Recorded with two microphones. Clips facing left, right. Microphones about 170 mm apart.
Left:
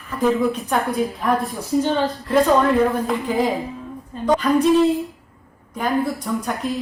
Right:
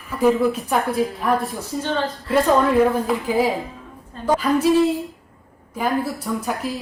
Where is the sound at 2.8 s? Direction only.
5° right (ahead or behind).